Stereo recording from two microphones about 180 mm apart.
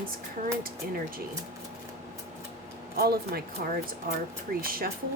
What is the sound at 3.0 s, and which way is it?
Speech, 60° right (ahead or behind).